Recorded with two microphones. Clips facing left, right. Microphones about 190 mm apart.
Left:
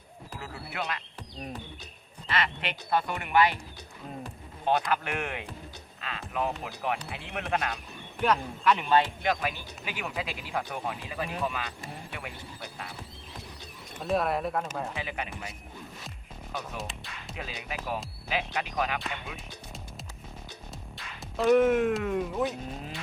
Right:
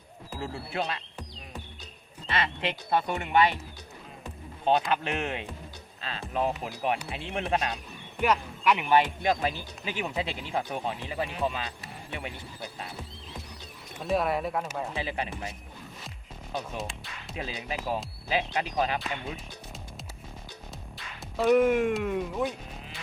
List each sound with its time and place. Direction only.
0.3 s speech: 30° right (ahead or behind)
2.2 s speech: 25° right (ahead or behind)
4.6 s speech: 25° right (ahead or behind)
8.2 s speech: 10° right (ahead or behind)
9.3 s speech: 30° right (ahead or behind)
14.0 s speech: centre (ahead or behind)
14.9 s speech: 30° right (ahead or behind)
16.7 s music: centre (ahead or behind)
17.3 s speech: 30° right (ahead or behind)
20.9 s speech: centre (ahead or behind)